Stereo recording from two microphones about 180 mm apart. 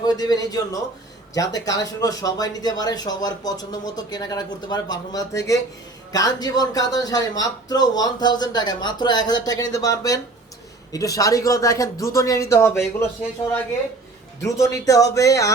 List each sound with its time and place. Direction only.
0.0 s speech: 20° left (ahead or behind)
14.4 s speech: 15° left (ahead or behind)